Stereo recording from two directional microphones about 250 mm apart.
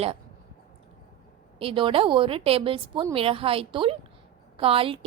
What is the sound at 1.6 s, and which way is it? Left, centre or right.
A woman's voice, right.